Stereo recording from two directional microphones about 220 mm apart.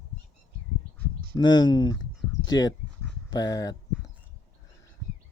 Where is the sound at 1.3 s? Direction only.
20° left (ahead or behind).